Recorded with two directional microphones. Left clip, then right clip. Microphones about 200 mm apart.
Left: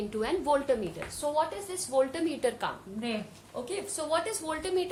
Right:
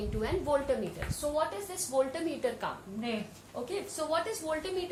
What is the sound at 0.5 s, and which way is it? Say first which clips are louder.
Speech: left 3 dB; 55° left (ahead or behind).